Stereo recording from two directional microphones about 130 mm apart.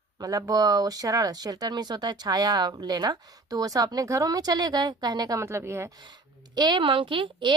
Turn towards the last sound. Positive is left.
turn(degrees=-40)  # may be behind; listen again after turning